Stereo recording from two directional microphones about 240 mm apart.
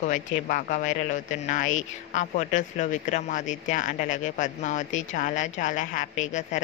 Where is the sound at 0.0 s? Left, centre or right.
Left.